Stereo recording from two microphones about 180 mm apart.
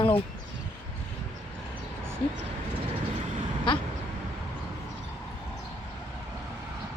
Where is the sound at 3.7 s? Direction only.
25° left (ahead or behind).